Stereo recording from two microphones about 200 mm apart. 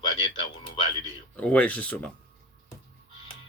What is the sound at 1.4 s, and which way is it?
Speech, 5° left (ahead or behind).